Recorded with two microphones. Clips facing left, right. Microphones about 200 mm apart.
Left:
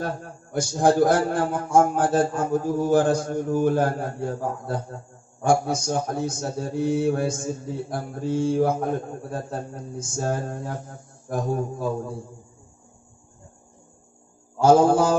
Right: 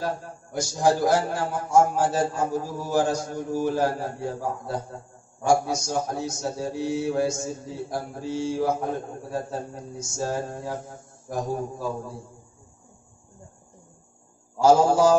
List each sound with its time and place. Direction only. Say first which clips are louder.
0.0 s a man's voice: even; 55° left (ahead or behind)
14.6 s a man's voice: left 1 dB; 55° left (ahead or behind)